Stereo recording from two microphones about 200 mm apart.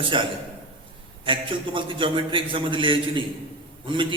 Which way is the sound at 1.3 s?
25° right (ahead or behind).